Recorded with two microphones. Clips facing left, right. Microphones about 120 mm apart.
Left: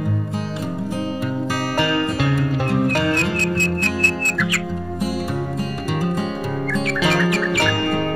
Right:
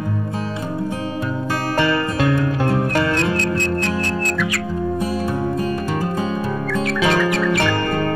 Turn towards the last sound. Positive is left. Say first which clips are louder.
# right 1 dB
turn(degrees=0)  # may be behind; listen again after turning